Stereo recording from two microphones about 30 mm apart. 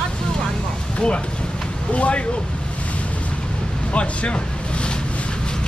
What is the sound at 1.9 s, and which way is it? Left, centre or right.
Speech, left.